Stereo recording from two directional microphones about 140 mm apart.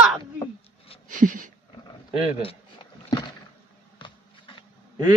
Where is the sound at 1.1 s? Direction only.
65° right (ahead or behind).